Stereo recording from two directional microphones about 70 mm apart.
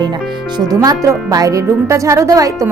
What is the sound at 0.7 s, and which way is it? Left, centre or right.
A woman's voice, right.